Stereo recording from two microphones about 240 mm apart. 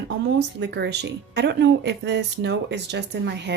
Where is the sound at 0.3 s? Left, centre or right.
Right.